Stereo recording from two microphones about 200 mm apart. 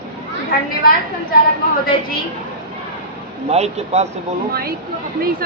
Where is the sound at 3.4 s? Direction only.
30° right (ahead or behind).